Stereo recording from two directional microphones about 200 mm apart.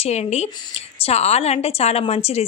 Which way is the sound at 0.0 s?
30° left (ahead or behind).